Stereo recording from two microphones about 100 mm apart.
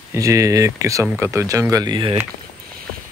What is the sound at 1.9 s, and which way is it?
Speech, 60° right (ahead or behind).